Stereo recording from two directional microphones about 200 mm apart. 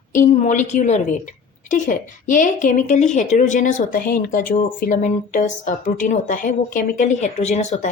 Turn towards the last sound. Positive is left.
turn(degrees=35)  # may be behind; listen again after turning